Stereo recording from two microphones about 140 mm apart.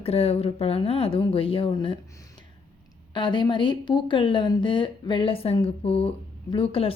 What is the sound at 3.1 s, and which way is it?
Speech, 35° left (ahead or behind).